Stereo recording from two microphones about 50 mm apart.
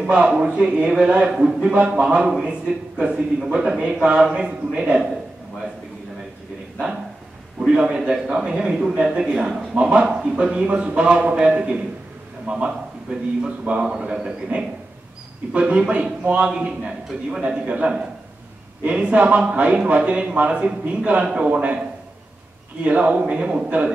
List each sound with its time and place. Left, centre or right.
0.0 s a man's voice: centre
7.6 s a man's voice: centre
22.8 s a man's voice: right